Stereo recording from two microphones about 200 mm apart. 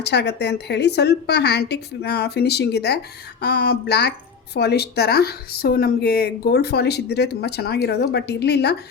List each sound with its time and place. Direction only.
0.0 s a woman's voice: 55° left (ahead or behind)